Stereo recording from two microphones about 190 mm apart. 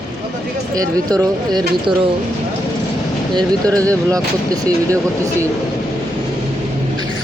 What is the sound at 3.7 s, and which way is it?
Speech, 5° left (ahead or behind).